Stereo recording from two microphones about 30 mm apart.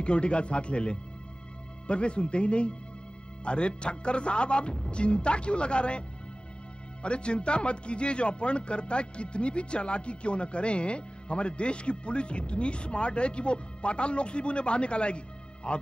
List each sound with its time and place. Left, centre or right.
0.0 s a man's voice: left